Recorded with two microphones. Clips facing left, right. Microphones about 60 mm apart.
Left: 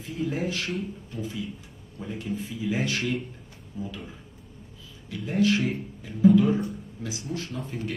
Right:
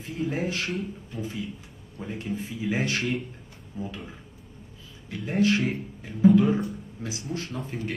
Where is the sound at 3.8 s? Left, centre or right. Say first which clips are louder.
Even; right.